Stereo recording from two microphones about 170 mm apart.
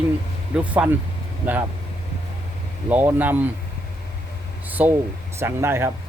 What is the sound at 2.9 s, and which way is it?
Speech, 10° right (ahead or behind).